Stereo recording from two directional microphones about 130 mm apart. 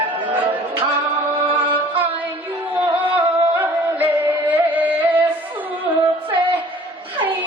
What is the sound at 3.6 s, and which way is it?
Music, 10° right (ahead or behind).